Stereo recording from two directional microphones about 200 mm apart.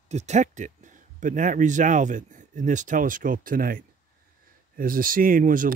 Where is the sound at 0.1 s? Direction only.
35° right (ahead or behind).